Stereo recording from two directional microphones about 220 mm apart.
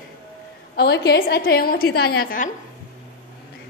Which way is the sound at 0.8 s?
45° left (ahead or behind).